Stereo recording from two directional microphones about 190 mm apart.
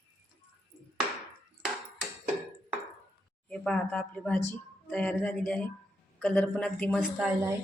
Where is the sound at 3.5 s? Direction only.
5° left (ahead or behind).